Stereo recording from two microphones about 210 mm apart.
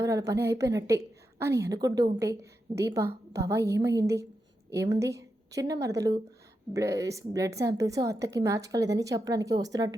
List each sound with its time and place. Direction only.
0.3 s a woman's voice: 15° right (ahead or behind)